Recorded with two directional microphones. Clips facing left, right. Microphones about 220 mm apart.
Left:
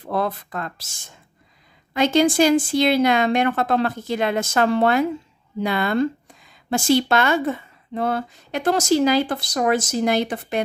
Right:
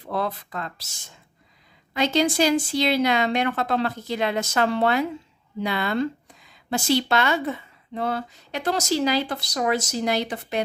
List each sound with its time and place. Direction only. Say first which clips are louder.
0.0 s speech: left 3 dB; 50° left (ahead or behind)